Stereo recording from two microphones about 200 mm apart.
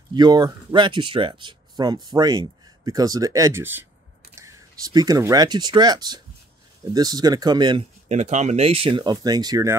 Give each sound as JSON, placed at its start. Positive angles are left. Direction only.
{"t": 0.1, "sound": "speech", "side_deg": -20}
{"t": 8.1, "sound": "speech", "side_deg": -35}